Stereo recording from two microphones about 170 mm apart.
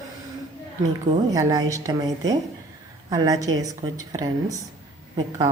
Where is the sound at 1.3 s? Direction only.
20° right (ahead or behind).